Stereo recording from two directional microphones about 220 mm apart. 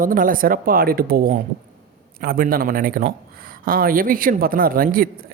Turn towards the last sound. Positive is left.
turn(degrees=-40)  # may be behind; listen again after turning